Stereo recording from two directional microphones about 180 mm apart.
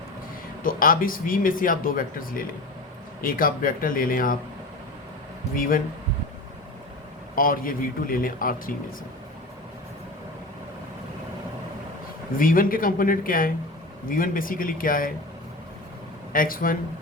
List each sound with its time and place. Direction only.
0.6 s speech: 50° left (ahead or behind)
5.5 s speech: 50° left (ahead or behind)
7.3 s speech: 50° left (ahead or behind)
12.4 s speech: 50° left (ahead or behind)
16.3 s speech: 50° left (ahead or behind)